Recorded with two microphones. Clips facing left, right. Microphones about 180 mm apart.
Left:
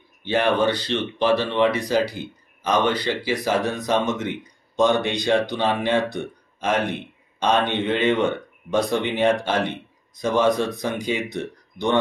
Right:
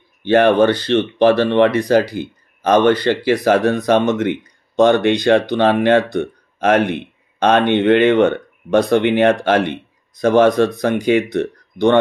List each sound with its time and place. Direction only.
0.2 s speech: 60° right (ahead or behind)